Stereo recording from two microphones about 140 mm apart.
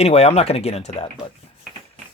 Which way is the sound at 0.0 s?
50° left (ahead or behind).